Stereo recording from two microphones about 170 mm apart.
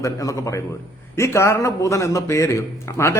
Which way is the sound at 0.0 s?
20° left (ahead or behind).